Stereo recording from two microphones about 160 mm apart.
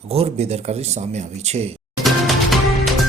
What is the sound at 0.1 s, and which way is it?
Speech, 40° right (ahead or behind).